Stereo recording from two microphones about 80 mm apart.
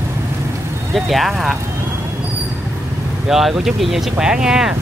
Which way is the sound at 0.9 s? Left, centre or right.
Centre.